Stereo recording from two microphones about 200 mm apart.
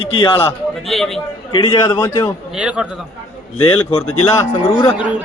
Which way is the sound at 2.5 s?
5° right (ahead or behind).